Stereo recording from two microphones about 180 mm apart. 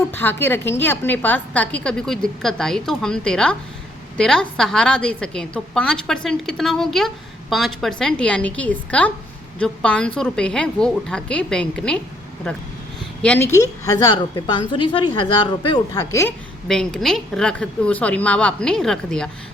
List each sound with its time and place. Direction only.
0.1 s a woman's voice: 10° left (ahead or behind)
16.6 s a woman's voice: centre (ahead or behind)